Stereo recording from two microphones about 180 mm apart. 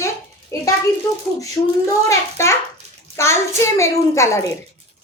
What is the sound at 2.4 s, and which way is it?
A child's voice, 15° left (ahead or behind).